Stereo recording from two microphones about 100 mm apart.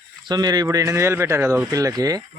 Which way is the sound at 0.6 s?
30° right (ahead or behind).